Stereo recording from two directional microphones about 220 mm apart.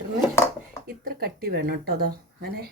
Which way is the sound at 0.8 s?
45° right (ahead or behind).